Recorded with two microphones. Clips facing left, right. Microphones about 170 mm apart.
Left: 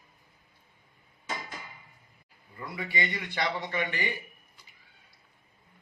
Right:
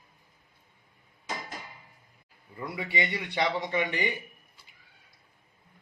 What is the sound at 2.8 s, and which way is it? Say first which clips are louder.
A man's voice: right 1 dB; 20° right (ahead or behind).